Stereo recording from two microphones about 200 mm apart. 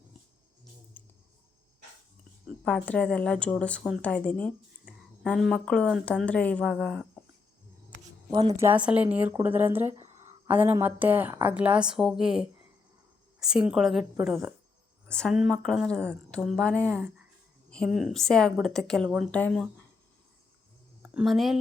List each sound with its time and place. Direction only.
0.9 s a sound: 10° left (ahead or behind)
2.6 s speech: 5° left (ahead or behind)
8.3 s a woman's voice: 20° right (ahead or behind)
8.7 s speech: 5° right (ahead or behind)
21.0 s speech: 5° right (ahead or behind)